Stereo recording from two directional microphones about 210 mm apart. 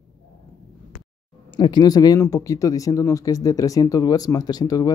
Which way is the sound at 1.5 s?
20° left (ahead or behind).